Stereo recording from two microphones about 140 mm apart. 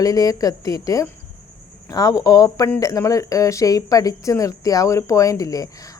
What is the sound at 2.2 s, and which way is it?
Speech, 25° left (ahead or behind).